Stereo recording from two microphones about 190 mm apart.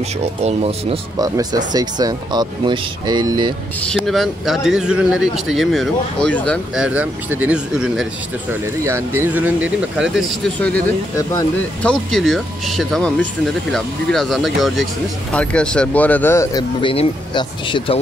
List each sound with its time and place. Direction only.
0.4 s speech: 35° right (ahead or behind)
1.2 s speech: 20° right (ahead or behind)
3.9 s speech: centre (ahead or behind)
11.8 s speech: 5° left (ahead or behind)
16.8 s speech: 30° left (ahead or behind)